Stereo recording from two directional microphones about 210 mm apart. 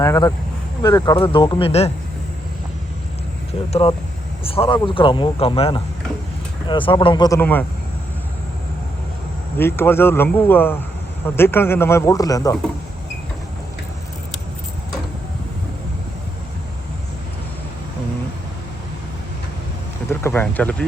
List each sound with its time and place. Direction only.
0.0 s speech: 15° left (ahead or behind)
3.7 s speech: 25° left (ahead or behind); by 7.6 s 10° left (ahead or behind)
9.6 s speech: 10° left (ahead or behind)
20.1 s a sound: 10° left (ahead or behind)